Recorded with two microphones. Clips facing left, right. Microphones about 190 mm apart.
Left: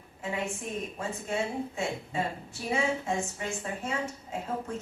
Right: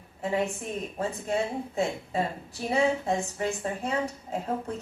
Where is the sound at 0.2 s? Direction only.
35° right (ahead or behind).